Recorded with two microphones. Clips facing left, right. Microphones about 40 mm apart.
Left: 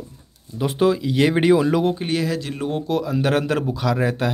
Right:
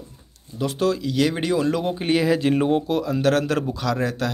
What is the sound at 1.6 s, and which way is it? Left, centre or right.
Speech, centre.